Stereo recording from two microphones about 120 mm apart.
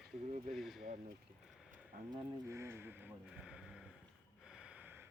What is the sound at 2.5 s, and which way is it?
Speech, 20° right (ahead or behind).